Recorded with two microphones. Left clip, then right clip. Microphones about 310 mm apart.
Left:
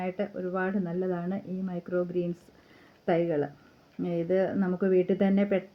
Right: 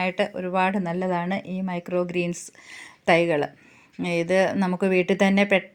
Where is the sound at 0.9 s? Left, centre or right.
Centre.